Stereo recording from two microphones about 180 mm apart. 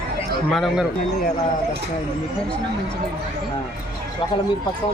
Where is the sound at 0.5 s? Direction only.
Centre (ahead or behind).